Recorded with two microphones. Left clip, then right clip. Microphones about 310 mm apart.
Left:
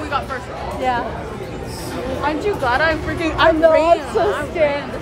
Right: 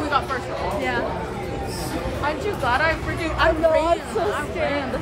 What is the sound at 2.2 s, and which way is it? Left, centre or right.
Speech, left.